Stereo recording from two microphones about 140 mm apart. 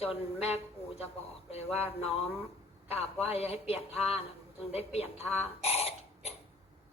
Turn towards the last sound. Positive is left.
turn(degrees=45)  # may be behind; listen again after turning